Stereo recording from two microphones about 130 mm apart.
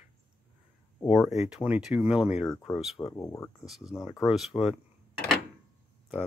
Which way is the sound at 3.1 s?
20° left (ahead or behind).